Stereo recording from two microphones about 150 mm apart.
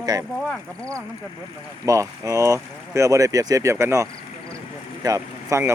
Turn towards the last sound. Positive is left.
turn(degrees=-20)  # may be behind; listen again after turning